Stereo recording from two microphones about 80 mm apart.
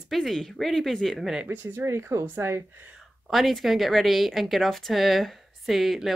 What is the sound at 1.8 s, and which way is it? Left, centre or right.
Speech, right.